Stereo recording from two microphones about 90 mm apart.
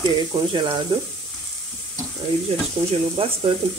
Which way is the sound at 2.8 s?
90° right.